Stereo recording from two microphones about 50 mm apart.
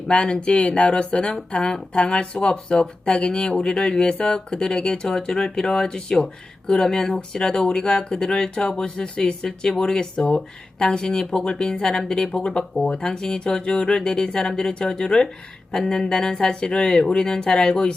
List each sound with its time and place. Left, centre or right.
0.1 s speech: left